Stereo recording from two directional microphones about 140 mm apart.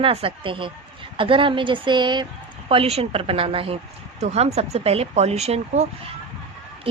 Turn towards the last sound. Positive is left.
turn(degrees=-50)  # may be behind; listen again after turning